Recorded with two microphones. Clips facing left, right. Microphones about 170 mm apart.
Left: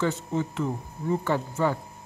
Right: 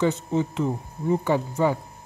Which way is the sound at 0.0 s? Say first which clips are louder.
Right 4 dB; 20° right (ahead or behind).